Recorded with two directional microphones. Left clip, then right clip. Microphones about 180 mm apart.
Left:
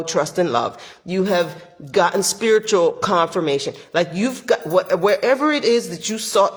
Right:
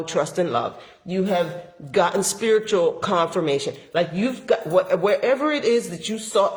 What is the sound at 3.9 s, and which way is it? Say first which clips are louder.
Speech: left 3 dB; 45° left (ahead or behind).